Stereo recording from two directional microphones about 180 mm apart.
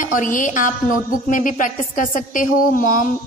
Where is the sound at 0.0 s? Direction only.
45° left (ahead or behind).